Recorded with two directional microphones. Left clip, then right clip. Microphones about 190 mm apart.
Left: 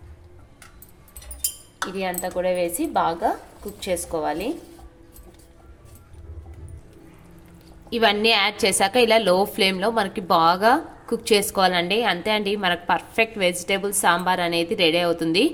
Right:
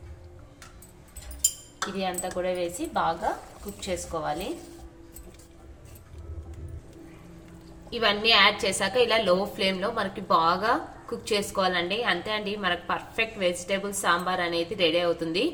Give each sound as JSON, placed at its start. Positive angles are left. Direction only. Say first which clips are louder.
{"t": 2.0, "sound": "a woman's voice", "louder": "left 5 dB", "side_deg": 65}
{"t": 7.9, "sound": "a woman's voice", "louder": "left 4 dB", "side_deg": 55}